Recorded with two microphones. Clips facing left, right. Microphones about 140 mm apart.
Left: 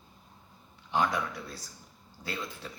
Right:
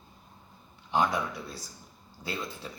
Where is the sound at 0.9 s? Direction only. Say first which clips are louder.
Right 2 dB; 20° right (ahead or behind).